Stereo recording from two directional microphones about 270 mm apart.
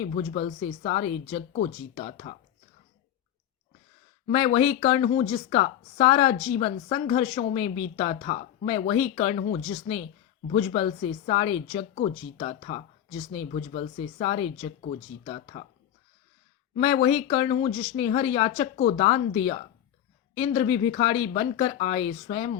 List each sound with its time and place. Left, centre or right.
0.0 s speech: left
4.3 s speech: left
16.7 s speech: left